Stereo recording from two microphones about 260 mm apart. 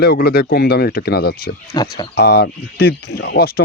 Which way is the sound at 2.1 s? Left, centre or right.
Left.